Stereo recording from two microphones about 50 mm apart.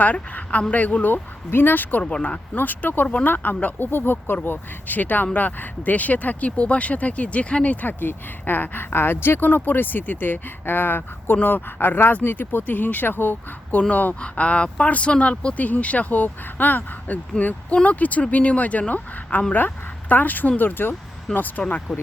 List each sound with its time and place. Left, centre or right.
0.0 s speech: left
2.0 s speech: left
2.6 s speech: left
17.4 s speech: centre
17.8 s speech: left
19.5 s speech: left
21.9 s speech: centre